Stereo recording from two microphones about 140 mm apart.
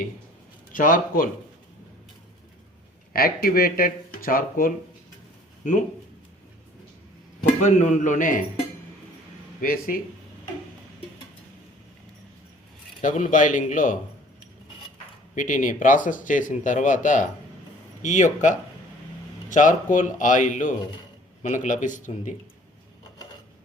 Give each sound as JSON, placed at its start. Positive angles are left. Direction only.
{"t": 0.7, "sound": "speech", "side_deg": 75}
{"t": 3.1, "sound": "speech", "side_deg": 90}
{"t": 5.6, "sound": "a man's voice", "side_deg": 65}
{"t": 7.6, "sound": "a man's voice", "side_deg": 60}
{"t": 9.6, "sound": "speech", "side_deg": 90}
{"t": 13.0, "sound": "speech", "side_deg": 65}
{"t": 15.4, "sound": "a man's voice", "side_deg": 70}